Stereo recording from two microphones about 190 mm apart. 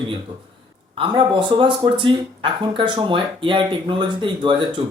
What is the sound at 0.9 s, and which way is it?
Speech, 25° right (ahead or behind).